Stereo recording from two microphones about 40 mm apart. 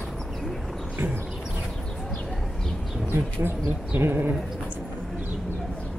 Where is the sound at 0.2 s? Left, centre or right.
Centre.